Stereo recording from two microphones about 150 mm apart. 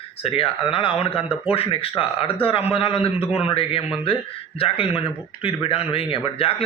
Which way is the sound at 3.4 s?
40° left (ahead or behind).